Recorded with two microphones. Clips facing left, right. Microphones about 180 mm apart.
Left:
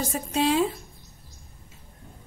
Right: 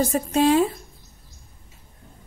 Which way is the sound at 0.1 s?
50° right (ahead or behind).